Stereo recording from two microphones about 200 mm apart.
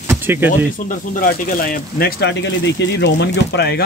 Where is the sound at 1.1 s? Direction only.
45° left (ahead or behind).